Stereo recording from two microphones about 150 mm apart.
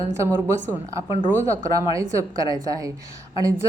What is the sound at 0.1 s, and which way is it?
Speech, 15° right (ahead or behind).